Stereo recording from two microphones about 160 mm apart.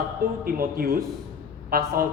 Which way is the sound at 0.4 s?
65° right (ahead or behind).